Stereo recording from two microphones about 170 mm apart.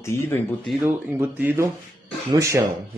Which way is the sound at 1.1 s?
10° right (ahead or behind).